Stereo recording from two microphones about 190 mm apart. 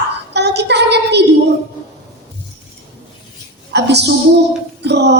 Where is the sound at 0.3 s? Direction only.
60° right (ahead or behind).